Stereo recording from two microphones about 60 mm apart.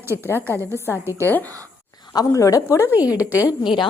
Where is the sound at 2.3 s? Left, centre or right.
Left.